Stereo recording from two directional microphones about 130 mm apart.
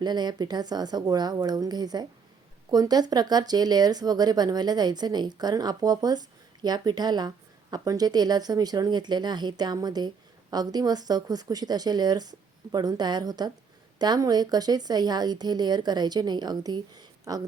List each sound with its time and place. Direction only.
0.0 s speech: 35° right (ahead or behind)